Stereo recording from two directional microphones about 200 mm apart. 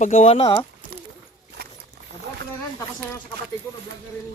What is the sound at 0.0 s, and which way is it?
Speech, 40° left (ahead or behind).